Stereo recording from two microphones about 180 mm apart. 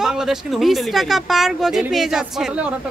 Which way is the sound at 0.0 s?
5° right (ahead or behind).